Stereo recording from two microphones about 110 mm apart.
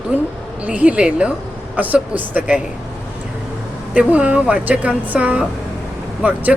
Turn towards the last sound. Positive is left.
turn(degrees=-15)  # may be behind; listen again after turning